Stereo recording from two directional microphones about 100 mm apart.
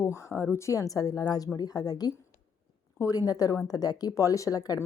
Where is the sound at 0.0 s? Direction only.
30° left (ahead or behind).